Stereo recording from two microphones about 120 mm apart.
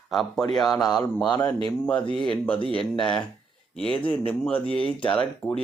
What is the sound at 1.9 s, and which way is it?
Speech, 10° left (ahead or behind).